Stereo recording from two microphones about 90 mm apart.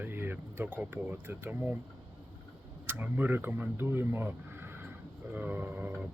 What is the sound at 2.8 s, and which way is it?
Speech, 20° right (ahead or behind).